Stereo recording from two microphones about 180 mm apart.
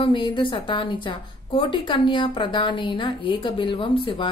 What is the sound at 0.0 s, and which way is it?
A woman's voice, 25° left (ahead or behind).